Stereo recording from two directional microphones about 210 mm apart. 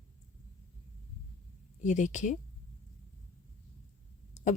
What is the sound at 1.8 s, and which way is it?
Speech, 35° left (ahead or behind).